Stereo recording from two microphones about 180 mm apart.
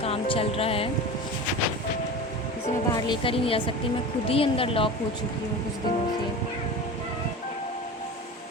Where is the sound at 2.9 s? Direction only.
25° left (ahead or behind).